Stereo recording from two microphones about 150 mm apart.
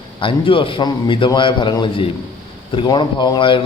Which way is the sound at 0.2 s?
35° left (ahead or behind).